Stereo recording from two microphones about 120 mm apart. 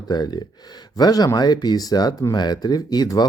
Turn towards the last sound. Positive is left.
turn(degrees=35)  # may be behind; listen again after turning